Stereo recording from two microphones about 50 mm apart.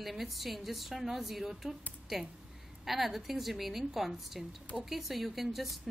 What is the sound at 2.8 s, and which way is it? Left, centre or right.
A woman's voice, centre.